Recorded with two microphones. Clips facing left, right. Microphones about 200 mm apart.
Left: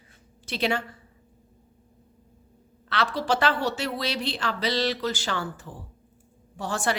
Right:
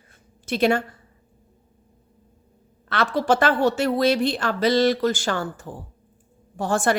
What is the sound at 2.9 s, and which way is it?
A woman's voice, 50° right (ahead or behind).